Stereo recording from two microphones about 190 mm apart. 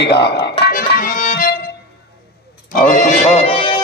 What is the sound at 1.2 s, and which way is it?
Music, 45° left (ahead or behind).